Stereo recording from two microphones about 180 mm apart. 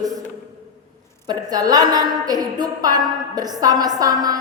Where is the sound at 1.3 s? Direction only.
20° right (ahead or behind).